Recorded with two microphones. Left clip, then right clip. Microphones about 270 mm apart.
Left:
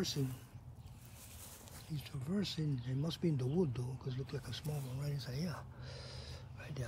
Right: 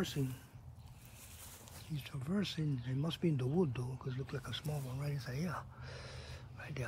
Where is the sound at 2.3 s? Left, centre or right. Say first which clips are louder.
Right 1 dB; centre.